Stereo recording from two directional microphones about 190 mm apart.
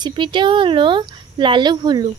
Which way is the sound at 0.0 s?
25° right (ahead or behind).